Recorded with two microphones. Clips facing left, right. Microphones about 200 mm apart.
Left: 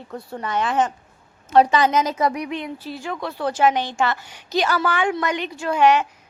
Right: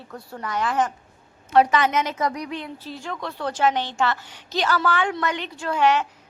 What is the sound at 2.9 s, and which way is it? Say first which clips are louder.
A woman's voice: left 2 dB; 5° left (ahead or behind).